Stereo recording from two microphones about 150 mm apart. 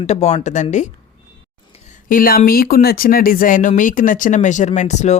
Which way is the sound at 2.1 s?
75° left (ahead or behind).